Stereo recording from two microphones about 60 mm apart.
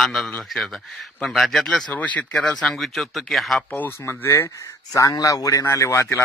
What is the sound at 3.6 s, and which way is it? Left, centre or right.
Speech, left.